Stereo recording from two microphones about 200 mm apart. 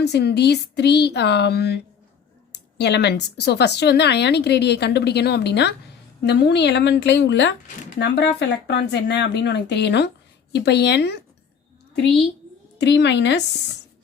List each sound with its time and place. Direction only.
0.0 s speech: 55° left (ahead or behind)
12.8 s speech: 60° left (ahead or behind)